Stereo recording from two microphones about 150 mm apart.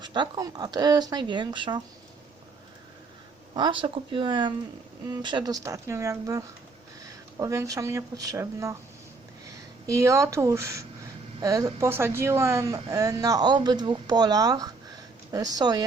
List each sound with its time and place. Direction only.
0.0 s a woman's voice: 30° right (ahead or behind)
3.5 s a woman's voice: 30° right (ahead or behind)
9.8 s a woman's voice: 20° right (ahead or behind)